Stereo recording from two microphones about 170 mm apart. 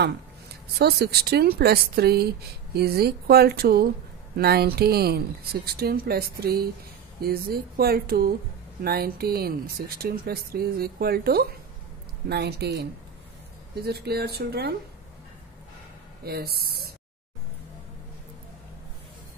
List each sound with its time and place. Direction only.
0.0 s a woman's voice: 75° right (ahead or behind)
13.8 s a woman's voice: 70° right (ahead or behind)
16.3 s a woman's voice: 65° right (ahead or behind)